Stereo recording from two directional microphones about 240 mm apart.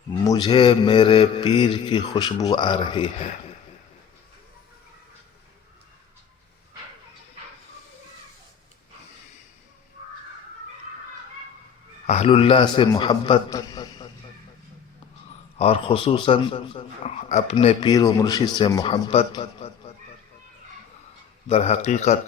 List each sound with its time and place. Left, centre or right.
0.3 s speech: centre
12.0 s speech: left
15.5 s speech: left
21.4 s speech: left